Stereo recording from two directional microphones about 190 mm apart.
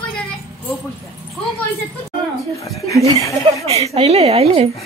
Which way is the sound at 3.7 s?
35° right (ahead or behind).